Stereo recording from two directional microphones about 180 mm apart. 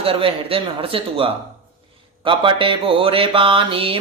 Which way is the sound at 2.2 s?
30° right (ahead or behind).